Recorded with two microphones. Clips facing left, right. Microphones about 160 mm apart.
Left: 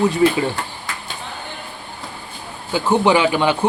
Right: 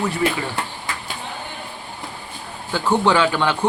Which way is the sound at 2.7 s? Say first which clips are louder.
Left 2 dB; 15° left (ahead or behind).